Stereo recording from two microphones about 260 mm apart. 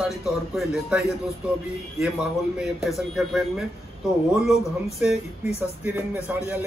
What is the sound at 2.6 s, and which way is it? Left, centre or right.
Speech, centre.